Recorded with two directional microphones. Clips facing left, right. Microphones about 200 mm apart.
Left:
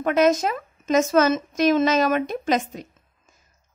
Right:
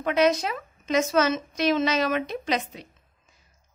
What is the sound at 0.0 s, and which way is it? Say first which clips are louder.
A woman's voice: left 3 dB; 45° left (ahead or behind).